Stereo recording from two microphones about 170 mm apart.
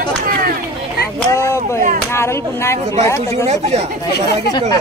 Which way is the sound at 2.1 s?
15° left (ahead or behind).